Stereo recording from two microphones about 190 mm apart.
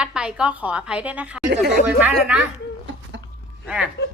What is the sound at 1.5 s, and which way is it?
Speech, 60° right (ahead or behind).